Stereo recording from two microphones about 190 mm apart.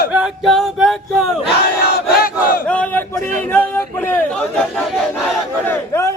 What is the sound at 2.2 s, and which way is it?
Battle cry, 50° left (ahead or behind).